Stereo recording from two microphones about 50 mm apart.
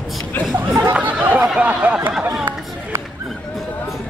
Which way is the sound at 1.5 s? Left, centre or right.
Right.